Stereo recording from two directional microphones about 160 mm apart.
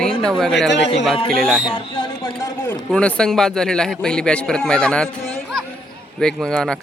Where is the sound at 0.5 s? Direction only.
90° left.